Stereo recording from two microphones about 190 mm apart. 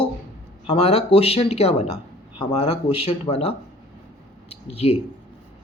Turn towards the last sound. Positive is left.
turn(degrees=30)  # may be behind; listen again after turning